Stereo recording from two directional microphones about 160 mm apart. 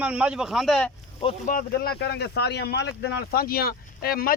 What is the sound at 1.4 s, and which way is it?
Speech, 55° left (ahead or behind).